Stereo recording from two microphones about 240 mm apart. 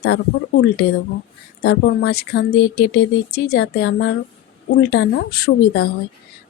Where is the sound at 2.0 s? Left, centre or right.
Left.